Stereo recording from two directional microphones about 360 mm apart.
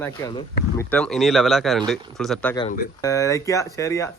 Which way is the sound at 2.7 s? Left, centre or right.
Centre.